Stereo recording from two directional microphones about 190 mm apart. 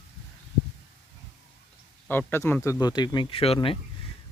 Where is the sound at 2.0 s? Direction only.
10° left (ahead or behind).